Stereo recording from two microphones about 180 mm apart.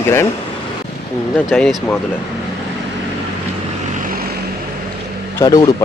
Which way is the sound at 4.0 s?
55° right (ahead or behind).